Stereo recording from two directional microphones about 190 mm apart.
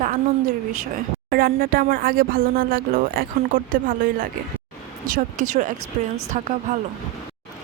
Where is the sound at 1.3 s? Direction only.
55° right (ahead or behind).